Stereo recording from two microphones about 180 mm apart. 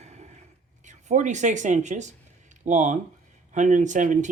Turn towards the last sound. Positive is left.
turn(degrees=-45)  # may be behind; listen again after turning